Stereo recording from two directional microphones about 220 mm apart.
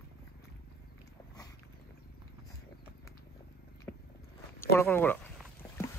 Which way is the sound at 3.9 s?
5° left (ahead or behind).